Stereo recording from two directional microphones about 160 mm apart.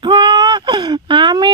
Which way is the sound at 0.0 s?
30° right (ahead or behind).